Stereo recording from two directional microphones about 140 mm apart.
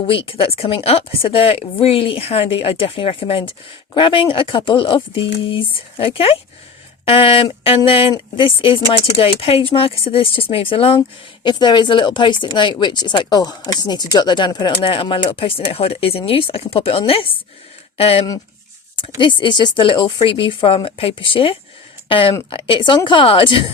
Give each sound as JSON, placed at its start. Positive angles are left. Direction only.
{"t": 0.1, "sound": "speech", "side_deg": 40}
{"t": 19.2, "sound": "speech", "side_deg": 35}